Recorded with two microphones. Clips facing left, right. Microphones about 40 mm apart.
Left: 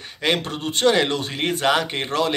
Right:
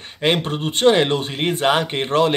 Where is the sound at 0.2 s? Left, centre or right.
Right.